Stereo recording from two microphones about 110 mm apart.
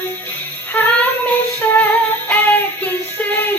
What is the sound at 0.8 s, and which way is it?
Child singing, 15° left (ahead or behind).